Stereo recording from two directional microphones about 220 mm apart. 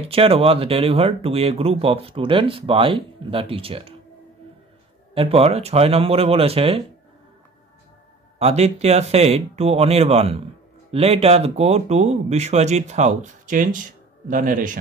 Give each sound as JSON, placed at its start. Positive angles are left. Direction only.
{"t": 0.0, "sound": "speech", "side_deg": -25}
{"t": 5.1, "sound": "speech", "side_deg": -25}
{"t": 8.4, "sound": "speech", "side_deg": -30}